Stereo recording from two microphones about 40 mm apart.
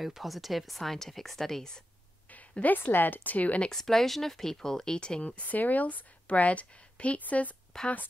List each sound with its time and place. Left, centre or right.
0.0 s speech: centre
2.8 s speech: left
3.7 s speech: centre
5.4 s a woman's voice: left
7.7 s speech: centre